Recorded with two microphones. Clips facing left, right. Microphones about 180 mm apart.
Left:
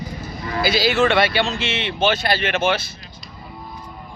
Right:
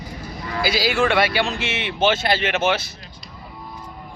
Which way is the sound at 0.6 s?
10° right (ahead or behind).